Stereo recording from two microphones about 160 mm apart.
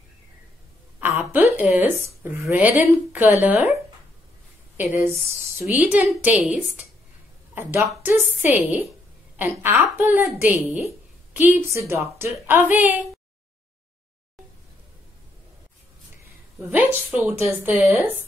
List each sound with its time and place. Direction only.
0.9 s a sound: 10° right (ahead or behind)
1.6 s a woman's voice: 10° right (ahead or behind)
4.7 s a woman's voice: 15° right (ahead or behind)
8.0 s a woman's voice: 10° right (ahead or behind)
16.7 s a woman's voice: 10° right (ahead or behind)